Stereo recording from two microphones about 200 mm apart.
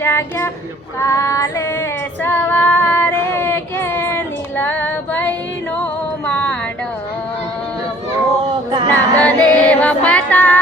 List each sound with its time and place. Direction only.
0.0 s child singing: 10° left (ahead or behind)
0.9 s female singing: 15° left (ahead or behind)
2.2 s child singing: 10° left (ahead or behind)
5.8 s music: 5° left (ahead or behind)
8.9 s music: 5° left (ahead or behind)